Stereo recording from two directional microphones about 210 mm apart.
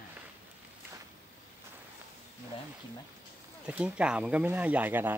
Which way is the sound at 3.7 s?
5° right (ahead or behind).